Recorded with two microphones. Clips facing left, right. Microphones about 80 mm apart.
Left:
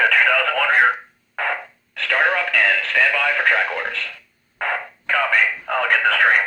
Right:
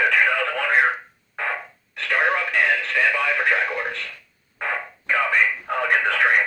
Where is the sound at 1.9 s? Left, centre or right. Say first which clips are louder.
Left 2 dB; left.